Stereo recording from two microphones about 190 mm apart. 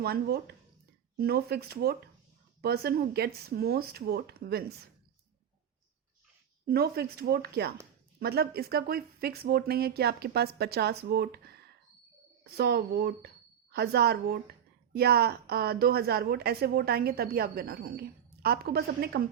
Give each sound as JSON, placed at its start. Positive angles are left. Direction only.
{"t": 0.0, "sound": "a woman's voice", "side_deg": -55}
{"t": 6.7, "sound": "a woman's voice", "side_deg": -55}
{"t": 12.5, "sound": "a woman's voice", "side_deg": -55}